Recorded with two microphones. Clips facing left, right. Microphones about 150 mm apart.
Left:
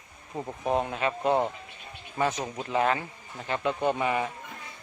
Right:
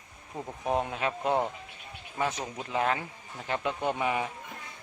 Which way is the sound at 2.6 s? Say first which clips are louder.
Left 3 dB; centre (ahead or behind).